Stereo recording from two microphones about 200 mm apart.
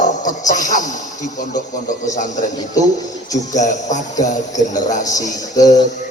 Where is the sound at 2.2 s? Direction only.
40° left (ahead or behind).